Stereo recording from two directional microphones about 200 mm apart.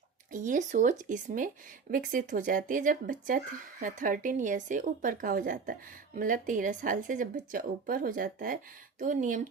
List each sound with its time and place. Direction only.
0.3 s speech: 40° right (ahead or behind)